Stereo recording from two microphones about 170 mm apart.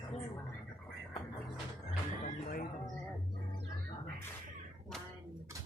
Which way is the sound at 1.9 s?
50° left (ahead or behind).